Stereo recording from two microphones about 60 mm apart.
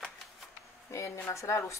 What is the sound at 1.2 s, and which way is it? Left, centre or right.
Speech, left.